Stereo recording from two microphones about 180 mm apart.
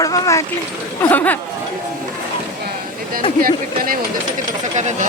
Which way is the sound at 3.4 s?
50° right (ahead or behind).